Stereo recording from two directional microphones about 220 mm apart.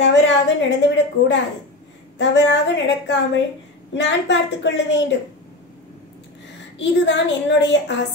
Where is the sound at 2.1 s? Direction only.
55° left (ahead or behind).